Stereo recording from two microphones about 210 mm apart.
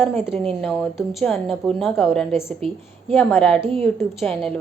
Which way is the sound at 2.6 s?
25° right (ahead or behind).